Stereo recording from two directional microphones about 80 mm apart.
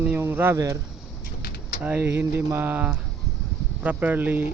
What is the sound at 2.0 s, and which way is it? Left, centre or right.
Speech, right.